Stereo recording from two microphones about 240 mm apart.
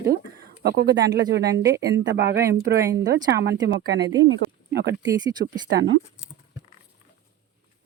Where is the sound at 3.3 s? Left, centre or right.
Right.